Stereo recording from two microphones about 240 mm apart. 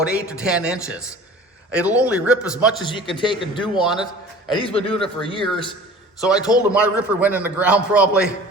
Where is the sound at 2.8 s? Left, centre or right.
Centre.